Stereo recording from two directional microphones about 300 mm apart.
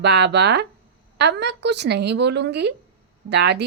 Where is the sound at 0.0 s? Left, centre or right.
Right.